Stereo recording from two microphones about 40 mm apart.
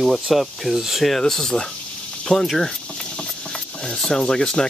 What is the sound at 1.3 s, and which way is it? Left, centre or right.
Speech, centre.